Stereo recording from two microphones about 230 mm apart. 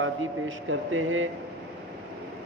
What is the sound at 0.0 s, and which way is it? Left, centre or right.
Speech, right.